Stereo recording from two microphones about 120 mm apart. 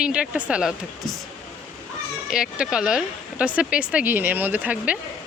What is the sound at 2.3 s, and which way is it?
Speech, 5° right (ahead or behind).